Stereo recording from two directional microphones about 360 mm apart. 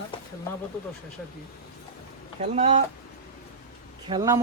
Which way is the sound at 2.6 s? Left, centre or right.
Centre.